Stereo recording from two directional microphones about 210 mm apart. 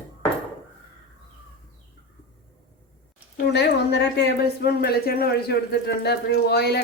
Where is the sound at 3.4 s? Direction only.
50° left (ahead or behind).